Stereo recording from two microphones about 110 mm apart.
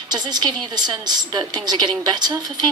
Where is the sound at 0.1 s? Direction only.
40° right (ahead or behind).